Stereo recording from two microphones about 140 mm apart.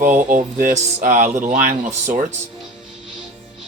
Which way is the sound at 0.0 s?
70° right (ahead or behind).